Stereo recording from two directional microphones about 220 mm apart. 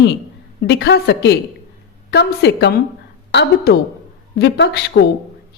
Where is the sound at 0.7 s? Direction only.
50° left (ahead or behind).